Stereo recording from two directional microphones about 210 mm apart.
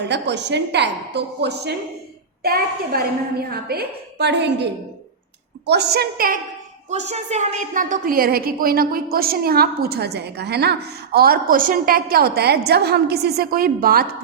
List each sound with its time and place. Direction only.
0.0 s a woman's voice: 55° right (ahead or behind)
6.9 s a woman's voice: 30° right (ahead or behind)